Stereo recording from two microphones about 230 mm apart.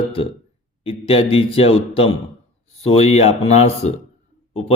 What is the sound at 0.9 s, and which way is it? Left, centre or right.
Speech, left.